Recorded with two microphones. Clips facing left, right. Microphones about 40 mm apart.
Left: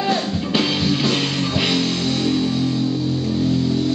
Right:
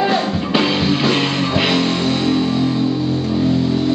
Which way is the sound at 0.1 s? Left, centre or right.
Centre.